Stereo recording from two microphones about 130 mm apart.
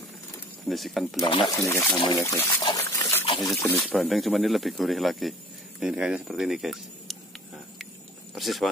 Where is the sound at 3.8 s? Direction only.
Centre (ahead or behind).